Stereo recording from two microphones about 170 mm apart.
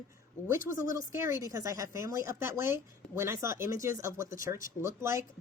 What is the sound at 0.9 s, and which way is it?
A woman's voice, 15° right (ahead or behind).